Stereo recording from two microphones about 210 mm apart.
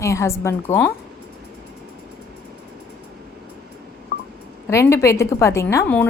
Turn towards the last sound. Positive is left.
turn(degrees=10)  # may be behind; listen again after turning